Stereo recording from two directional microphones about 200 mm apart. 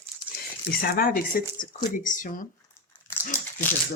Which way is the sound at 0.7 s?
45° left (ahead or behind).